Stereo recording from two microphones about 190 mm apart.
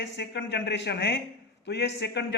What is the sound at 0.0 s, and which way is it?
A man's voice, 65° left (ahead or behind).